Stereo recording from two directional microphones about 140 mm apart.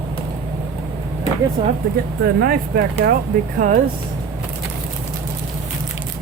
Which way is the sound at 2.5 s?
90° right.